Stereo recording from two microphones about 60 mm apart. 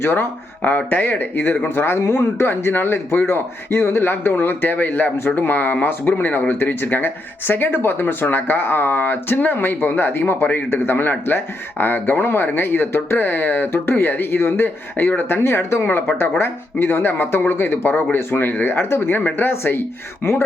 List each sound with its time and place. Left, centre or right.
0.0 s speech: left
2.0 s speech: left